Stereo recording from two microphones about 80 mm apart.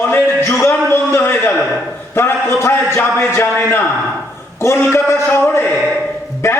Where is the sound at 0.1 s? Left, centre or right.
Left.